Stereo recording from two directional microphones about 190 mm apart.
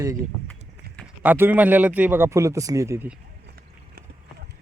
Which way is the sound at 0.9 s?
5° right (ahead or behind).